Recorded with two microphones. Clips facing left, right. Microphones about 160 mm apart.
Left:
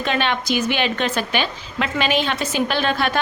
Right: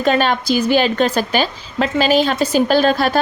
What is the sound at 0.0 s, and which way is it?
A woman's voice, 40° right (ahead or behind).